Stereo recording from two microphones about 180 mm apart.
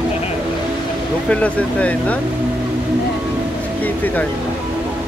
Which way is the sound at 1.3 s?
5° left (ahead or behind).